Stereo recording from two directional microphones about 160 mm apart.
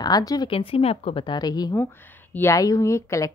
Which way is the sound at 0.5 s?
35° left (ahead or behind).